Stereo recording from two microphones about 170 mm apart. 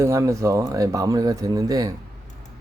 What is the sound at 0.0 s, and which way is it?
Speech, 15° right (ahead or behind).